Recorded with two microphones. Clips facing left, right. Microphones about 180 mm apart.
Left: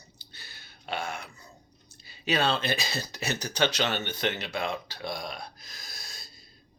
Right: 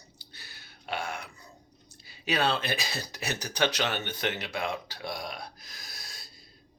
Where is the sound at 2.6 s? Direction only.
15° right (ahead or behind).